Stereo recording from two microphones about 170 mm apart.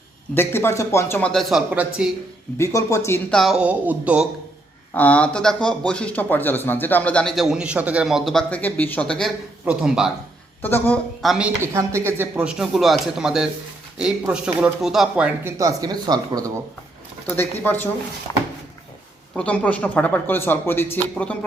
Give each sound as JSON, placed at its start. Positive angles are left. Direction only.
{"t": 0.3, "sound": "speech", "side_deg": 15}
{"t": 1.3, "sound": "speech", "side_deg": 0}
{"t": 2.6, "sound": "speech", "side_deg": 15}
{"t": 3.2, "sound": "speech", "side_deg": 0}
{"t": 4.9, "sound": "speech", "side_deg": 10}
{"t": 10.6, "sound": "speech", "side_deg": 10}
{"t": 11.2, "sound": "speech", "side_deg": -5}
{"t": 15.5, "sound": "speech", "side_deg": -20}
{"t": 17.2, "sound": "speech", "side_deg": 10}
{"t": 18.3, "sound": "a sound", "side_deg": 20}
{"t": 19.4, "sound": "speech", "side_deg": 5}